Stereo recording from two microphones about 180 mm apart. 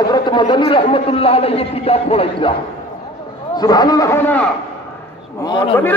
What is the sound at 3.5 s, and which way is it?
Speech, 20° left (ahead or behind).